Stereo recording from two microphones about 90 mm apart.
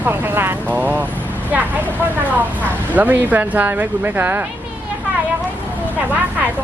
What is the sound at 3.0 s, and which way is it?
Speech, 20° right (ahead or behind).